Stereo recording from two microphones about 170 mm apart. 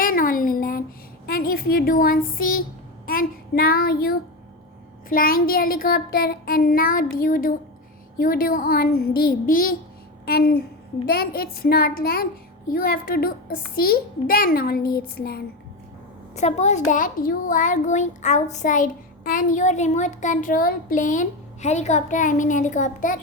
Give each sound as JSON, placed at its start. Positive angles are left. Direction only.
{"t": 0.0, "sound": "a sound", "side_deg": 55}
{"t": 1.3, "sound": "a woman's voice", "side_deg": 60}
{"t": 3.1, "sound": "child singing", "side_deg": 60}
{"t": 5.0, "sound": "a child's voice", "side_deg": 55}
{"t": 10.2, "sound": "a child's voice", "side_deg": 65}
{"t": 16.3, "sound": "a child's voice", "side_deg": 40}